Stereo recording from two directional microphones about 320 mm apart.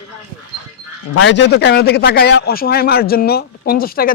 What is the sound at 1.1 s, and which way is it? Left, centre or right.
A man's voice, left.